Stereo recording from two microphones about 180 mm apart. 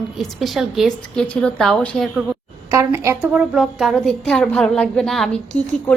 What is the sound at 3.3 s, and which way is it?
A woman's voice, centre (ahead or behind).